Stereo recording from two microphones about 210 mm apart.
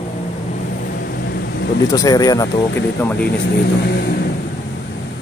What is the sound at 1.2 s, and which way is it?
Vehicle, 50° left (ahead or behind).